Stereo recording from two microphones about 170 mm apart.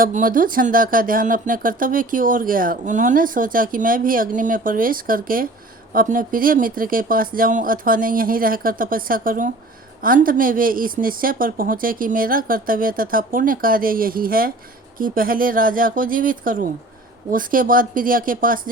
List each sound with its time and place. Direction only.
0.0 s speech: 55° right (ahead or behind)